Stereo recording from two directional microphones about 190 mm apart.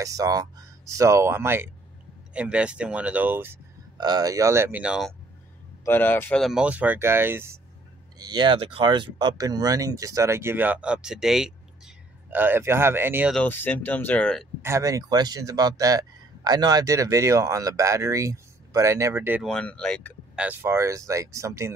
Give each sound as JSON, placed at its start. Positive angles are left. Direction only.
{"t": 0.0, "sound": "speech", "side_deg": -20}
{"t": 5.9, "sound": "speech", "side_deg": 10}
{"t": 13.3, "sound": "speech", "side_deg": 5}
{"t": 14.6, "sound": "speech", "side_deg": -15}
{"t": 19.4, "sound": "speech", "side_deg": 5}
{"t": 20.3, "sound": "speech", "side_deg": -10}